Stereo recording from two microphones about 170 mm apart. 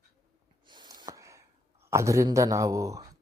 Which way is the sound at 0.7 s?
25° right (ahead or behind).